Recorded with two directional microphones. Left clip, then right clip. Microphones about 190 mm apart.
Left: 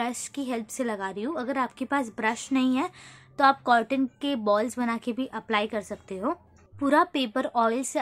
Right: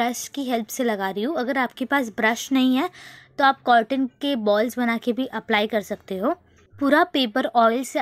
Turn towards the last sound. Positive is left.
turn(degrees=-20)  # may be behind; listen again after turning